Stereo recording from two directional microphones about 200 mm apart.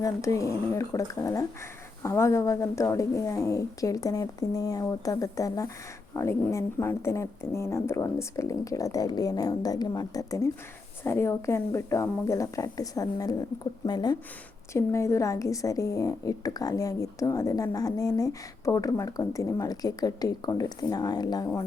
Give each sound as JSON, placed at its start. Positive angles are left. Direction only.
{"t": 0.0, "sound": "a woman's voice", "side_deg": 15}